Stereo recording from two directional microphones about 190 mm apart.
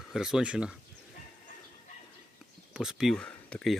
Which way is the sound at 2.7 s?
5° right (ahead or behind).